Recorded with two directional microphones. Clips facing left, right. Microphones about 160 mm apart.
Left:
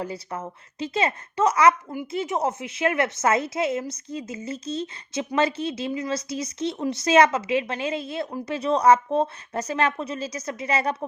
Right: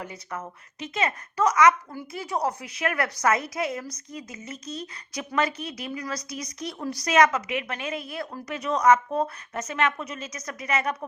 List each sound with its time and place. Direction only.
0.0 s a woman's voice: 30° left (ahead or behind)